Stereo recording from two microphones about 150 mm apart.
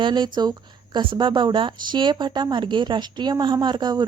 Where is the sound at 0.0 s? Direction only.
30° right (ahead or behind).